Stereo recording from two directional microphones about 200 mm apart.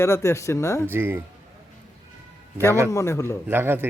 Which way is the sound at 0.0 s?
15° left (ahead or behind).